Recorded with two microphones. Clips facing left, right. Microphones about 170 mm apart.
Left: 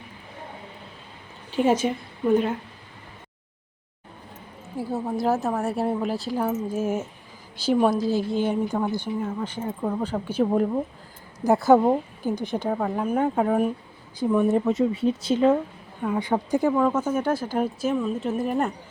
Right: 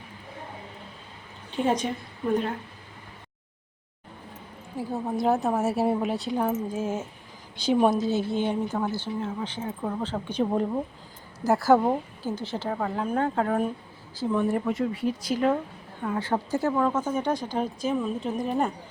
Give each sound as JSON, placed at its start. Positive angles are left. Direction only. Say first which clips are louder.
{"t": 1.6, "sound": "a woman's voice", "louder": "left 4 dB", "side_deg": 5}
{"t": 4.8, "sound": "a woman's voice", "louder": "left 1 dB", "side_deg": 5}
{"t": 8.7, "sound": "speech", "louder": "left 3 dB", "side_deg": 15}
{"t": 11.7, "sound": "speech", "louder": "left 3 dB", "side_deg": 15}
{"t": 16.0, "sound": "a woman's voice", "louder": "left 3 dB", "side_deg": 15}